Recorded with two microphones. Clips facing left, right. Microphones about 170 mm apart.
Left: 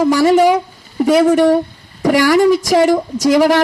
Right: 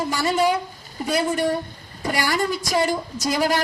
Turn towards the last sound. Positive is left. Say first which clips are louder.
# left 10 dB
turn(degrees=90)